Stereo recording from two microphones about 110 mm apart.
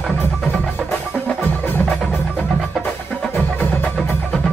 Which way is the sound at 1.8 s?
5° left (ahead or behind).